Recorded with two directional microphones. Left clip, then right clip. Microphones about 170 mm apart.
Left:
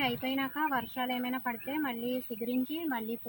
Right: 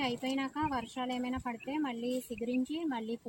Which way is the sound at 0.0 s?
25° right (ahead or behind).